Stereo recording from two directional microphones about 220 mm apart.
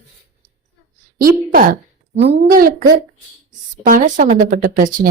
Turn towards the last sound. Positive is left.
turn(degrees=-40)  # may be behind; listen again after turning